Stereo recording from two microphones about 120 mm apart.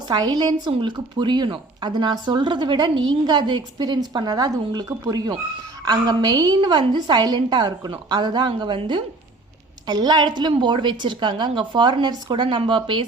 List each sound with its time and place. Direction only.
0.1 s speech: 35° right (ahead or behind)